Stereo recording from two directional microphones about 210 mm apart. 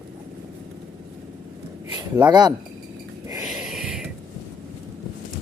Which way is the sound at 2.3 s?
20° right (ahead or behind).